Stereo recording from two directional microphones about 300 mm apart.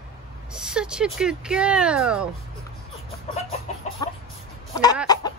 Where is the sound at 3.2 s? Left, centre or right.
Left.